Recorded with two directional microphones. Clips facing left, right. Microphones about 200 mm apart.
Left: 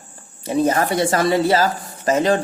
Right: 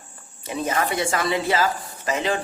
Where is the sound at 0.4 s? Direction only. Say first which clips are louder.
Left 7 dB; 35° left (ahead or behind).